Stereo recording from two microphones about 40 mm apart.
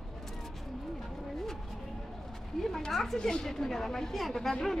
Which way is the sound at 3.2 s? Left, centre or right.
Centre.